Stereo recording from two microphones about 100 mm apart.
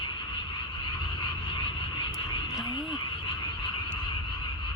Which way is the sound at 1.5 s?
55° left (ahead or behind).